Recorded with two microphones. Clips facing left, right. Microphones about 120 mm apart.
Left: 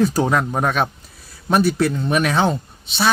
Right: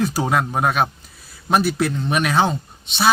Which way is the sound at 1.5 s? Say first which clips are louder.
Left 2 dB; centre (ahead or behind).